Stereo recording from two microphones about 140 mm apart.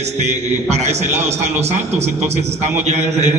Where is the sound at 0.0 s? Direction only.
55° right (ahead or behind).